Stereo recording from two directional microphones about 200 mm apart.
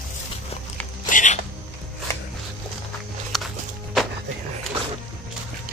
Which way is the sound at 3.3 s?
Centre (ahead or behind).